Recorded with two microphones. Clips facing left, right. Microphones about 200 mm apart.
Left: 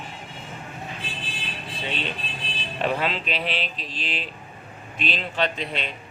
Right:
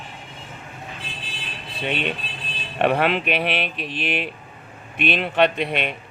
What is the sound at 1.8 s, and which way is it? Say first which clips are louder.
Speech: right 6 dB; 60° right (ahead or behind).